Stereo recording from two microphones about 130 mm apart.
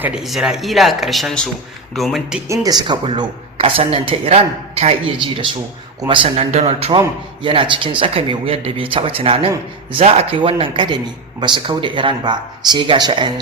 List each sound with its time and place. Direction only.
0.0 s speech: 5° right (ahead or behind)
2.5 s speech: 30° right (ahead or behind)
3.6 s speech: 50° right (ahead or behind)
5.1 s speech: 40° right (ahead or behind)